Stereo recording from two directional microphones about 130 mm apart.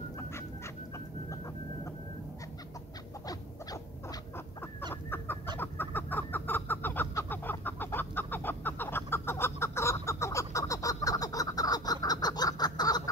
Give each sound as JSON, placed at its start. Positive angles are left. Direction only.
{"t": 3.3, "sound": "dog", "side_deg": 30}
{"t": 5.6, "sound": "chicken", "side_deg": 15}
{"t": 10.0, "sound": "a sound", "side_deg": 20}